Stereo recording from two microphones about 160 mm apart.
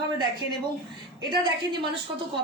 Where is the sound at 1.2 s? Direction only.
30° right (ahead or behind).